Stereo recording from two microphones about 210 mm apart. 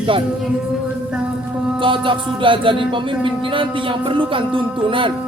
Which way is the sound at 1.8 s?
25° right (ahead or behind).